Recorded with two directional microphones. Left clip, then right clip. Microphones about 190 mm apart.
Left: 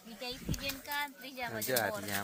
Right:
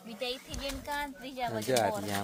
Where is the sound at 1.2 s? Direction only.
25° right (ahead or behind).